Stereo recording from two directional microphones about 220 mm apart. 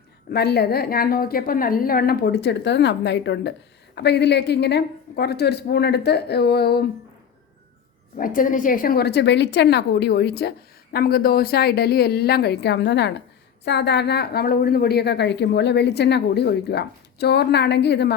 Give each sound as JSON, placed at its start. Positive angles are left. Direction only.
{"t": 0.3, "sound": "a woman's voice", "side_deg": 45}
{"t": 8.1, "sound": "a woman's voice", "side_deg": 40}